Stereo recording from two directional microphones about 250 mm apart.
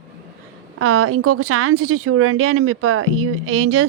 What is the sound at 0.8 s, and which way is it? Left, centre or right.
Speech, right.